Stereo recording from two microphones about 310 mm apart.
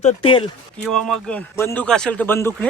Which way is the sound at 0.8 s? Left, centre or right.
Centre.